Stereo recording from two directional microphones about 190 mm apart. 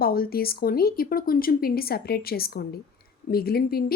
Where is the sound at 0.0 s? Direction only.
50° left (ahead or behind).